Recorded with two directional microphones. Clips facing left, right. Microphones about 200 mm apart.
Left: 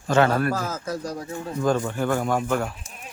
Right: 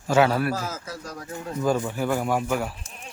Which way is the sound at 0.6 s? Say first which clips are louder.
Left 4 dB; 50° left (ahead or behind).